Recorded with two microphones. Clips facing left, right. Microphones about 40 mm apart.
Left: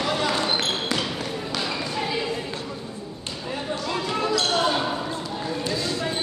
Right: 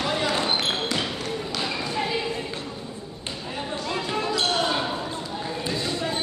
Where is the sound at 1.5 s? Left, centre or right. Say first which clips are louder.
Left 1 dB; centre.